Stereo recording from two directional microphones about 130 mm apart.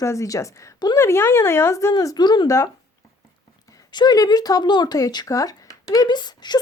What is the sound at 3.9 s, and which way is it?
Speech, 35° left (ahead or behind).